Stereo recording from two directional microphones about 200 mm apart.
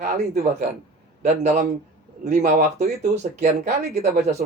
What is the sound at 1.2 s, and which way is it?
Speech, 35° right (ahead or behind).